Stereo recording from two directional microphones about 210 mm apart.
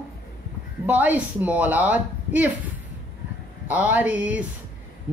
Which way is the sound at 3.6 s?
5° right (ahead or behind).